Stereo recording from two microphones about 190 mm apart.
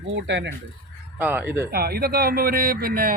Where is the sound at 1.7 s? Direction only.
55° right (ahead or behind).